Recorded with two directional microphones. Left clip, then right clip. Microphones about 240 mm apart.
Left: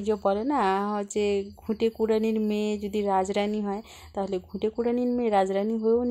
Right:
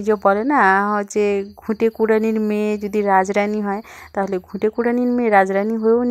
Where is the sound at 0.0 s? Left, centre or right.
Right.